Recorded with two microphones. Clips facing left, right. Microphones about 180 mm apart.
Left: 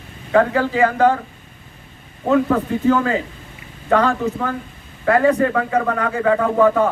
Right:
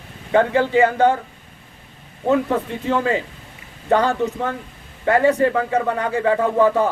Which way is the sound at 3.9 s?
30° right (ahead or behind).